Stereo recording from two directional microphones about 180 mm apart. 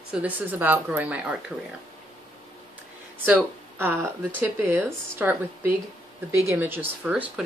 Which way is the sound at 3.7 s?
10° right (ahead or behind).